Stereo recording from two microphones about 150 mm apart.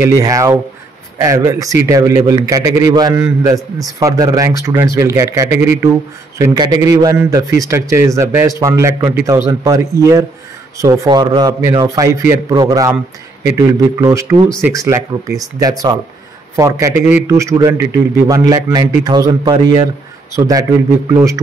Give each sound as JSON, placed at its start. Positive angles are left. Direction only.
{"t": 0.0, "sound": "a man's voice", "side_deg": -20}
{"t": 16.5, "sound": "a man's voice", "side_deg": -20}